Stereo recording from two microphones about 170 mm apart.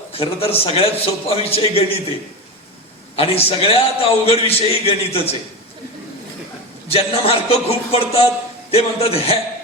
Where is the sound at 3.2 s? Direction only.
35° left (ahead or behind).